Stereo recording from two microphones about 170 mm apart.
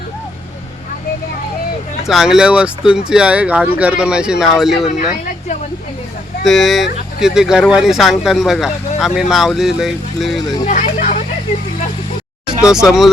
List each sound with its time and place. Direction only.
2.0 s speech: centre (ahead or behind)
6.4 s speech: centre (ahead or behind)
10.7 s speech: 45° left (ahead or behind)
12.6 s speech: 5° right (ahead or behind)